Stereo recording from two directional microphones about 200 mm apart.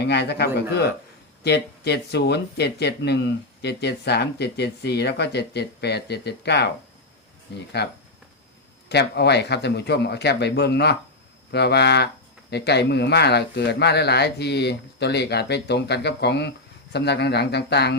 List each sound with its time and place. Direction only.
0.1 s speech: 55° left (ahead or behind)
7.8 s speech: 55° left (ahead or behind)